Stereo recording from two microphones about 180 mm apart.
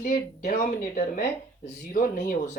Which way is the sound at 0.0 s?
45° left (ahead or behind).